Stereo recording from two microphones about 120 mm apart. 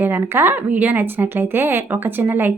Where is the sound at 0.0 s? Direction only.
15° right (ahead or behind).